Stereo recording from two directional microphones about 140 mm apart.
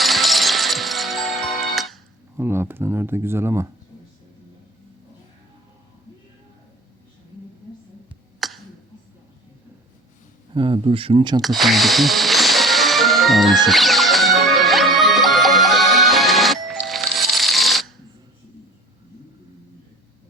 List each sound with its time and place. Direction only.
0.0 s music: centre (ahead or behind)
2.3 s speech: 15° right (ahead or behind)
8.4 s a sound: centre (ahead or behind)
10.5 s speech: 40° right (ahead or behind)
11.4 s music: centre (ahead or behind)